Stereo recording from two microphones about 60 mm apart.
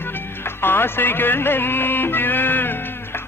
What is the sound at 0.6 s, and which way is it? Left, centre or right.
Music, left.